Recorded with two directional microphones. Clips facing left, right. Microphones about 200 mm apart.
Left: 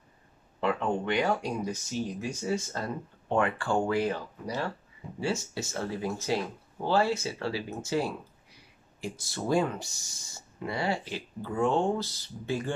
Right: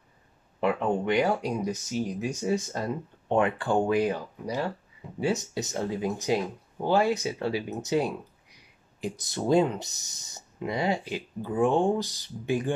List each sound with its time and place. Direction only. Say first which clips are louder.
0.6 s speech: right 3 dB; 15° right (ahead or behind)